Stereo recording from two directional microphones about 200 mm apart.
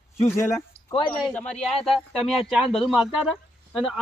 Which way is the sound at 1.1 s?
5° left (ahead or behind).